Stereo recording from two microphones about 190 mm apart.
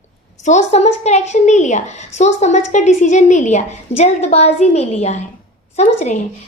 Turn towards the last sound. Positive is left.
turn(degrees=35)  # may be behind; listen again after turning